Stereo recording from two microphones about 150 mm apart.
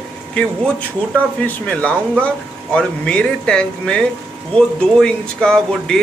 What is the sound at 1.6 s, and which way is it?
Speech, 10° left (ahead or behind).